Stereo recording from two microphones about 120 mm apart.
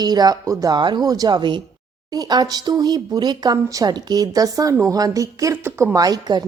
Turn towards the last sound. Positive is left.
turn(degrees=-35)  # may be behind; listen again after turning